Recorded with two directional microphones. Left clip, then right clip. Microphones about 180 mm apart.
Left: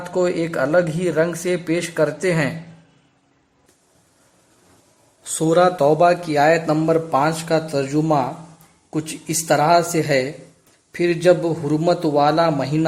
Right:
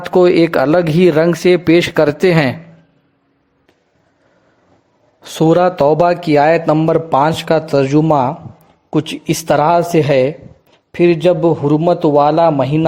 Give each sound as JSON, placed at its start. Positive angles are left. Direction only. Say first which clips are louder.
{"t": 0.0, "sound": "speech", "louder": "right 10 dB", "side_deg": -40}
{"t": 5.2, "sound": "a man's voice", "louder": "right 4 dB", "side_deg": -30}